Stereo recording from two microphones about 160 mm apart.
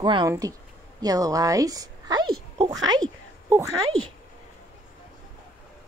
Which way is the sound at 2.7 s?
25° right (ahead or behind).